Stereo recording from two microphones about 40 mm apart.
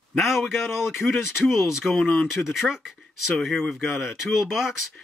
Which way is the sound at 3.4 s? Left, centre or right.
Centre.